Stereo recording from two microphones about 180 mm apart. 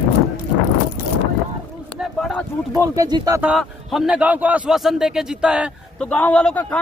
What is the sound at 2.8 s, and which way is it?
Speech, 20° right (ahead or behind).